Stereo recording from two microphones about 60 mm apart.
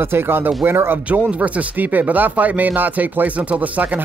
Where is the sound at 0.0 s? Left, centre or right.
Right.